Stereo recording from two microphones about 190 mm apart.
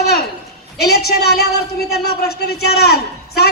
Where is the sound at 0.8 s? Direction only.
55° left (ahead or behind).